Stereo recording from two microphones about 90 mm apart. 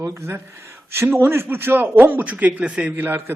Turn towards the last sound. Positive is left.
turn(degrees=-25)  # may be behind; listen again after turning